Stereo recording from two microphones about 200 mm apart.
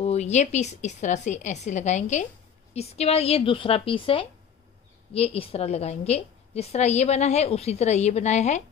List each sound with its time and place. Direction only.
0.0 s a woman's voice: 35° left (ahead or behind)